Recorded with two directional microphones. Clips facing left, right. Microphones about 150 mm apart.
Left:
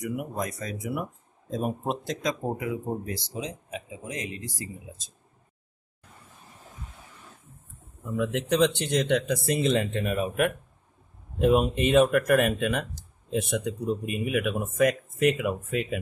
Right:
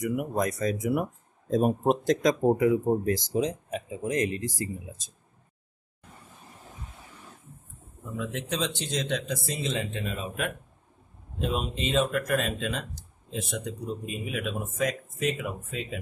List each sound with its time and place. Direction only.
0.0 s speech: 55° right (ahead or behind)
8.2 s speech: 65° left (ahead or behind)